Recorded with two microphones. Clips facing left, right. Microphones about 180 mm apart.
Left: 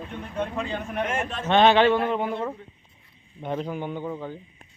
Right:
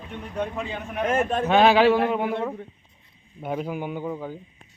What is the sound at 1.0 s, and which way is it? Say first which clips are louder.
Speech: right 7 dB; 35° right (ahead or behind).